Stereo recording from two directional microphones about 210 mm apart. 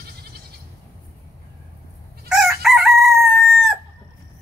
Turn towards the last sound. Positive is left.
turn(degrees=0)  # may be behind; listen again after turning